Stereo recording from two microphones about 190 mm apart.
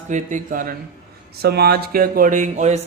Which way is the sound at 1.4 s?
55° right (ahead or behind).